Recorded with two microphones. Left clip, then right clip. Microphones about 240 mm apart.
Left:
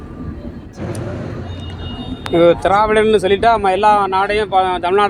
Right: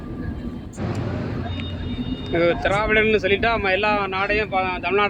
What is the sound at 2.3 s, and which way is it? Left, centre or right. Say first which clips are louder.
Speech: left 8 dB; left.